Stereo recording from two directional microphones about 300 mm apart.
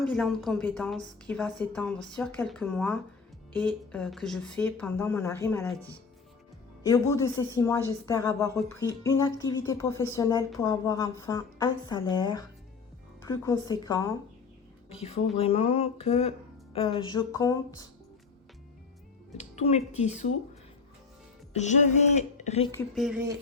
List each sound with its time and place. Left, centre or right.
0.0 s a woman's voice: centre
6.8 s speech: centre
15.4 s speech: centre
19.4 s speech: left
21.5 s speech: left
22.7 s a woman's voice: centre